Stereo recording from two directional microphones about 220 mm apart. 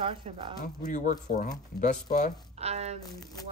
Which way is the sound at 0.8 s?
35° left (ahead or behind).